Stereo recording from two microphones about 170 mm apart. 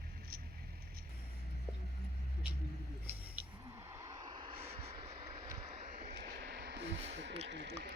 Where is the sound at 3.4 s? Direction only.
10° right (ahead or behind).